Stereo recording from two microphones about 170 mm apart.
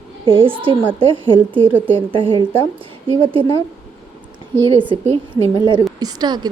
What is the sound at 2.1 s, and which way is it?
A woman's voice, 30° right (ahead or behind).